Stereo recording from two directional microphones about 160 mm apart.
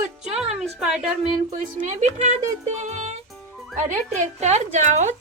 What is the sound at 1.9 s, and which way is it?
A woman's voice, 45° right (ahead or behind).